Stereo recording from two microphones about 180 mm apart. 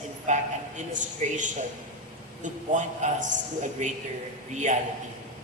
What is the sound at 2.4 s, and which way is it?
A man's voice, 45° right (ahead or behind).